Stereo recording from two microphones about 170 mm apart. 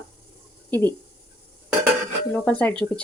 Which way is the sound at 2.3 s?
10° left (ahead or behind).